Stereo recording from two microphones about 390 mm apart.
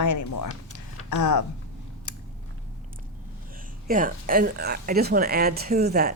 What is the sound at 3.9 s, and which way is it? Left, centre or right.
Speech, right.